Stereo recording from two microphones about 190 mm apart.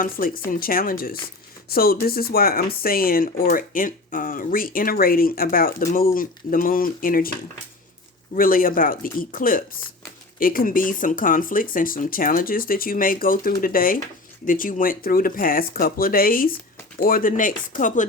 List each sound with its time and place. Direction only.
0.0 s speech: 50° left (ahead or behind)
8.4 s speech: 50° left (ahead or behind)